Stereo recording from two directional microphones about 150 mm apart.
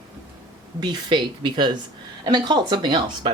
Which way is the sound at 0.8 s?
30° right (ahead or behind).